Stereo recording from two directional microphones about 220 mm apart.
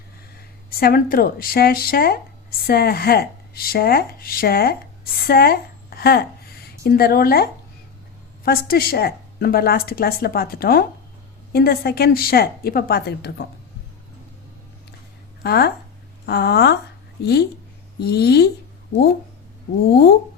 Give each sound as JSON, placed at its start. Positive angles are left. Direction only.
{"t": 0.8, "sound": "a woman's voice", "side_deg": 40}
{"t": 6.0, "sound": "a sound", "side_deg": 45}
{"t": 6.8, "sound": "a woman's voice", "side_deg": 45}
{"t": 8.4, "sound": "a woman's voice", "side_deg": 45}
{"t": 15.4, "sound": "a woman's voice", "side_deg": 45}